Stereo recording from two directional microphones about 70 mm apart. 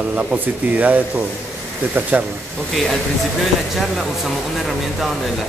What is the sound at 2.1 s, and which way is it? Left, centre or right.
Speech, right.